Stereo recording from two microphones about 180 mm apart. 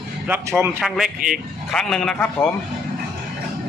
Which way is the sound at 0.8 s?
5° right (ahead or behind).